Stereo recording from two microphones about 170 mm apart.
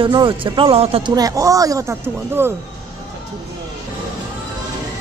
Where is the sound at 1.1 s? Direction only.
20° right (ahead or behind).